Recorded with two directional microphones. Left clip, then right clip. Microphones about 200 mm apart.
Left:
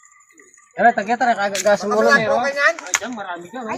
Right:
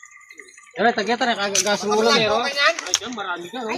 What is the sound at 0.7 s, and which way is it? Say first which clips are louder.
Speech: left 4 dB; 45° left (ahead or behind).